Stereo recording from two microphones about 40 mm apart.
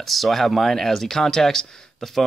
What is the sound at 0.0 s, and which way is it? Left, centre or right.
Speech, centre.